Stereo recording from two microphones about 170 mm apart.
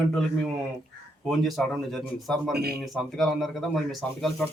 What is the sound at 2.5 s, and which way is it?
Speech, 65° right (ahead or behind).